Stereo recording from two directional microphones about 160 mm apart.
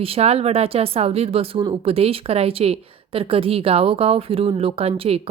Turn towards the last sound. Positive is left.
turn(degrees=-40)  # may be behind; listen again after turning